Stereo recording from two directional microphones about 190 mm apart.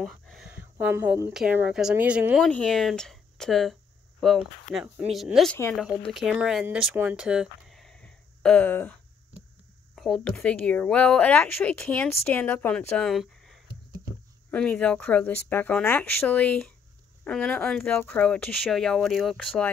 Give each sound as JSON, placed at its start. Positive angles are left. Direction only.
{"t": 0.0, "sound": "a sound", "side_deg": 0}
{"t": 1.3, "sound": "speech", "side_deg": -5}
{"t": 9.9, "sound": "a woman's voice", "side_deg": 0}